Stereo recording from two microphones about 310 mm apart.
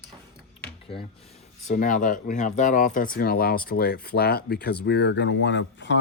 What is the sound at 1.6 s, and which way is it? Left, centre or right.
Speech, left.